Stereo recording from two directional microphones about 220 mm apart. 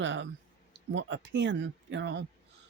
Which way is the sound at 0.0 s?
55° right (ahead or behind).